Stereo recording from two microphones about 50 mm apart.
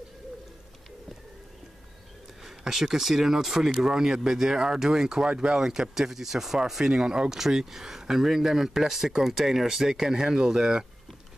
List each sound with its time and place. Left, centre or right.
2.4 s speech: centre